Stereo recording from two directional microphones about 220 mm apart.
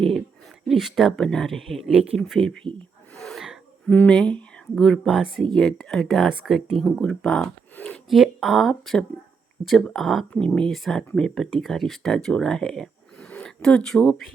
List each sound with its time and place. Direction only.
0.7 s speech: centre (ahead or behind)
3.2 s a sound: centre (ahead or behind)
5.5 s speech: 5° left (ahead or behind)